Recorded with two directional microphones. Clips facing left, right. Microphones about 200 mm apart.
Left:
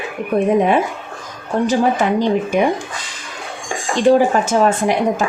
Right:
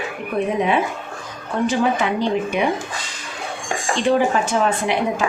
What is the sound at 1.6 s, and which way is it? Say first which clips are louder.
Speech: left 3 dB; 45° left (ahead or behind).